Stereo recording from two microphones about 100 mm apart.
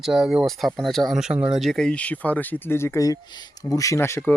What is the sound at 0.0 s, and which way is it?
Speech, 5° right (ahead or behind).